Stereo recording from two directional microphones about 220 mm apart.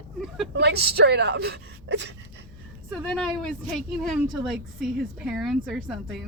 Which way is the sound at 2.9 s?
5° left (ahead or behind).